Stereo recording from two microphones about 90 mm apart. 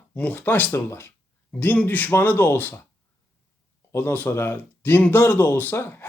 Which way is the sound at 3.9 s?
20° left (ahead or behind).